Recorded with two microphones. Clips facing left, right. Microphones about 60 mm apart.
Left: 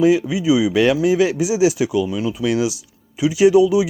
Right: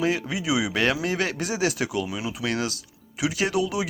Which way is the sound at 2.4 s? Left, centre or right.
Right.